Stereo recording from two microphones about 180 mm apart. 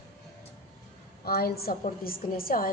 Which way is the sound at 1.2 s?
60° left (ahead or behind).